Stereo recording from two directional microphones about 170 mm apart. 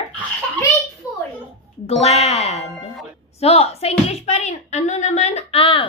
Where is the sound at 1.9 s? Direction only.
40° left (ahead or behind).